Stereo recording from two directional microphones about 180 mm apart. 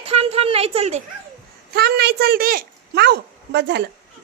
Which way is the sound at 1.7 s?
65° right (ahead or behind).